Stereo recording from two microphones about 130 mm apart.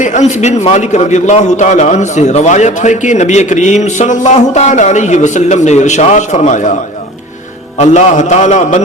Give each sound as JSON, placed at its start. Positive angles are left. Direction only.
{"t": 0.0, "sound": "a man's voice", "side_deg": 70}
{"t": 7.8, "sound": "a man's voice", "side_deg": 60}